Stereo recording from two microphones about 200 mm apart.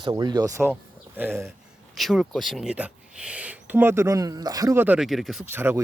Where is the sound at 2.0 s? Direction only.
Centre (ahead or behind).